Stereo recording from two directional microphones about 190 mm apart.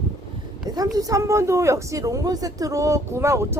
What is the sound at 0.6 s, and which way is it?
A woman's voice, 20° right (ahead or behind).